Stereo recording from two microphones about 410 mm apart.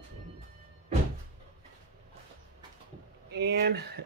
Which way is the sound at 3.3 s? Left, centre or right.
Right.